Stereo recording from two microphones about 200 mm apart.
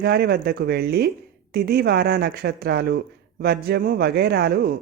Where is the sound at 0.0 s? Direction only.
55° right (ahead or behind).